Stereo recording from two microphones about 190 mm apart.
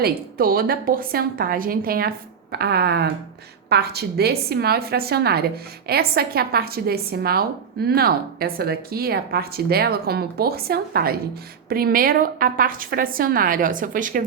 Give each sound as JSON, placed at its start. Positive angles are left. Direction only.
{"t": 0.0, "sound": "a woman's voice", "side_deg": -50}